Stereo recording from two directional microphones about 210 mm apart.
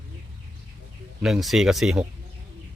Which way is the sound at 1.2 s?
Centre (ahead or behind).